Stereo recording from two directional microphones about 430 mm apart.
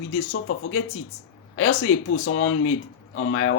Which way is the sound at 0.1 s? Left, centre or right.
Left.